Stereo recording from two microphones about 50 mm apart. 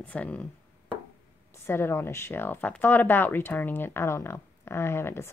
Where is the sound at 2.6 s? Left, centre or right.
Left.